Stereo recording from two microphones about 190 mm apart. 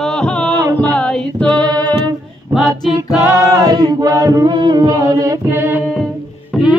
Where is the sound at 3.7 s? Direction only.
20° right (ahead or behind).